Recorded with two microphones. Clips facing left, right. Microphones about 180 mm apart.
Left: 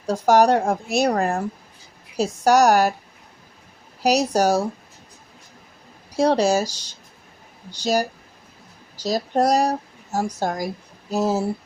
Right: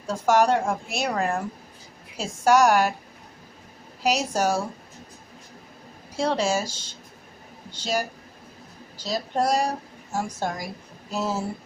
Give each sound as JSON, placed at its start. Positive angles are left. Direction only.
{"t": 0.1, "sound": "a woman's voice", "side_deg": 40}
{"t": 4.0, "sound": "a woman's voice", "side_deg": 40}
{"t": 6.1, "sound": "a woman's voice", "side_deg": 40}